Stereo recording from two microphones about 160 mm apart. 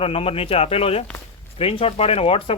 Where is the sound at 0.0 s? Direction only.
35° left (ahead or behind).